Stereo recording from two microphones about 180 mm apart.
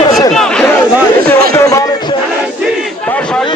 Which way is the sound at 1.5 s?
15° left (ahead or behind).